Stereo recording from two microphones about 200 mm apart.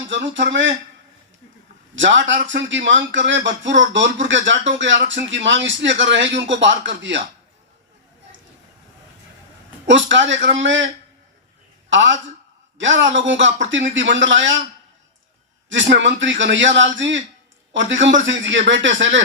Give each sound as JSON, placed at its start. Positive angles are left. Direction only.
{"t": 0.3, "sound": "speech", "side_deg": -65}
{"t": 2.0, "sound": "speech", "side_deg": -65}
{"t": 9.8, "sound": "speech", "side_deg": -70}
{"t": 11.9, "sound": "a man's voice", "side_deg": -70}
{"t": 15.7, "sound": "a man's voice", "side_deg": -65}